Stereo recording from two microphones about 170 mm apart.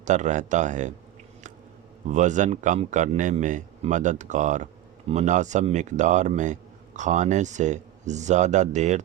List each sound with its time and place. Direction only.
0.0 s a man's voice: 45° right (ahead or behind)
2.0 s a man's voice: 45° right (ahead or behind)